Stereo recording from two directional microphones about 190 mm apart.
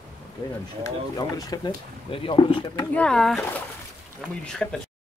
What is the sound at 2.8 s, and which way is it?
Speech, 5° left (ahead or behind).